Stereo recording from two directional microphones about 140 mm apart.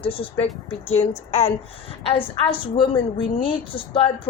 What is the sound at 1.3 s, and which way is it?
Speech, 50° left (ahead or behind).